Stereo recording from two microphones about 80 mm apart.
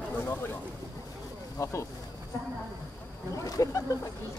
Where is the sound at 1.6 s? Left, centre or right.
Left.